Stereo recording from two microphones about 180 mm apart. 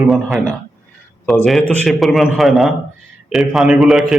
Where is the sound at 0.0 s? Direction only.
Centre (ahead or behind).